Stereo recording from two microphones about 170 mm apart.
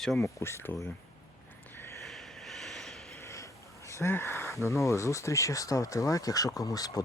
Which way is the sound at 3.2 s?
15° left (ahead or behind).